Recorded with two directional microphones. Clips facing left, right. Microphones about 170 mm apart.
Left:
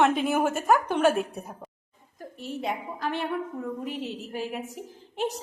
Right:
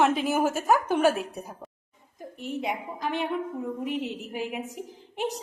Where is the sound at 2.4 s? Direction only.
15° right (ahead or behind).